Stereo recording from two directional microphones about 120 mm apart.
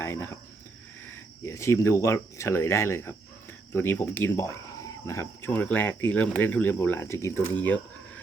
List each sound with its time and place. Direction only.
0.0 s speech: 20° left (ahead or behind)
1.5 s speech: 25° left (ahead or behind)